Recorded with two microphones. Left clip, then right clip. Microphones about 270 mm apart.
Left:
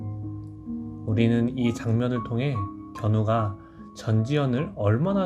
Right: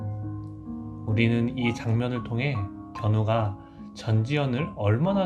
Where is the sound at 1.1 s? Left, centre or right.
Left.